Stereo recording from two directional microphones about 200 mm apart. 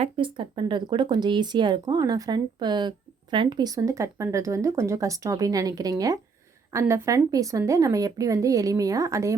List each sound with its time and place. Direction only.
0.0 s speech: 25° right (ahead or behind)